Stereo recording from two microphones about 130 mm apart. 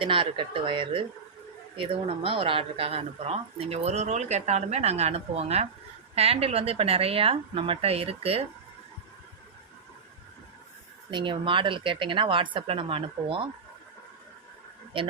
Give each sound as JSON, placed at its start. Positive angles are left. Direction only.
{"t": 0.0, "sound": "a woman's voice", "side_deg": -40}
{"t": 11.1, "sound": "a woman's voice", "side_deg": -40}
{"t": 14.9, "sound": "a woman's voice", "side_deg": -40}